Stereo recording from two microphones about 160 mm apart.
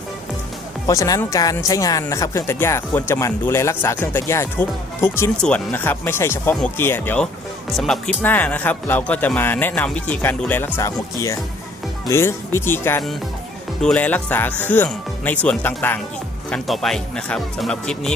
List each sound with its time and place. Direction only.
0.9 s speech: 20° left (ahead or behind)
16.5 s speech: centre (ahead or behind)